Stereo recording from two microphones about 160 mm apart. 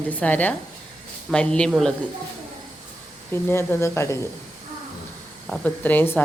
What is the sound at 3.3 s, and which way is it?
Speech, 15° left (ahead or behind).